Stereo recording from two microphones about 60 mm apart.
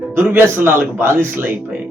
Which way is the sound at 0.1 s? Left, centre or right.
Right.